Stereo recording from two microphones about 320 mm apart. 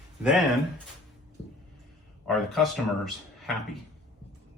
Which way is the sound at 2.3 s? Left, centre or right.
Centre.